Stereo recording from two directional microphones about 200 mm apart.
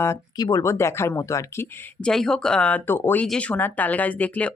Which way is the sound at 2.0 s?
Centre (ahead or behind).